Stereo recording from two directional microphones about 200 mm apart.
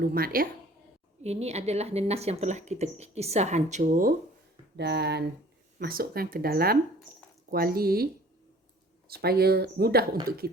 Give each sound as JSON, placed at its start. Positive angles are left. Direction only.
{"t": 0.0, "sound": "speech", "side_deg": -45}
{"t": 1.2, "sound": "speech", "side_deg": -30}
{"t": 4.8, "sound": "speech", "side_deg": -55}
{"t": 9.0, "sound": "speech", "side_deg": -50}